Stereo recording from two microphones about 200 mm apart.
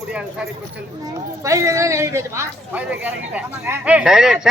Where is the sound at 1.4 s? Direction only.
15° right (ahead or behind).